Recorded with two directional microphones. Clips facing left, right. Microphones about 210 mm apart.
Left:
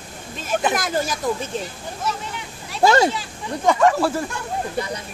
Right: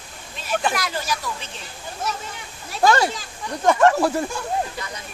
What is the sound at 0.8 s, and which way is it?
Speech, 50° left (ahead or behind).